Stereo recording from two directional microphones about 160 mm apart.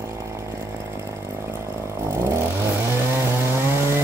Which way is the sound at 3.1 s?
15° right (ahead or behind).